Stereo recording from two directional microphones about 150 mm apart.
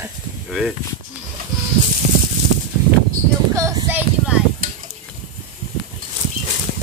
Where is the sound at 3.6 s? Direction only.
20° right (ahead or behind).